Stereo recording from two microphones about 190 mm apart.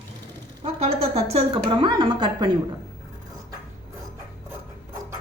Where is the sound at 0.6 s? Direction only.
30° right (ahead or behind).